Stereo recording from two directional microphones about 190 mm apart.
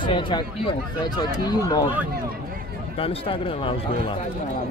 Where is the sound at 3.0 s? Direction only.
30° left (ahead or behind).